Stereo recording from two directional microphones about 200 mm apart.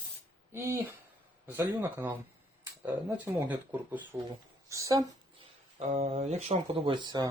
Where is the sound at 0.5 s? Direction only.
10° right (ahead or behind).